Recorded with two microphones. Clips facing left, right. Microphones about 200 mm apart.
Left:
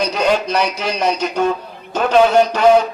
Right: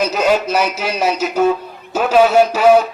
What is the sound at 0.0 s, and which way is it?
A man's voice, 5° right (ahead or behind).